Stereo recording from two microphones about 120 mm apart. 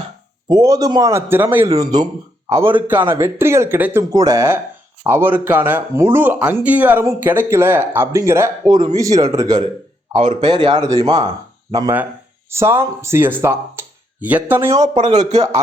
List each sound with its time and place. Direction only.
0.4 s speech: 35° right (ahead or behind)
1.1 s speech: 15° right (ahead or behind)
1.7 s speech: 30° right (ahead or behind)
2.8 s speech: 15° right (ahead or behind)
4.1 s speech: 30° right (ahead or behind)
8.6 s speech: 35° right (ahead or behind)
10.4 s speech: 40° right (ahead or behind)
10.8 s speech: 30° right (ahead or behind)
12.5 s speech: 20° right (ahead or behind)
14.8 s speech: 40° right (ahead or behind)